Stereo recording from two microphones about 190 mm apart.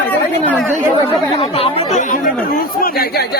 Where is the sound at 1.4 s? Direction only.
30° left (ahead or behind).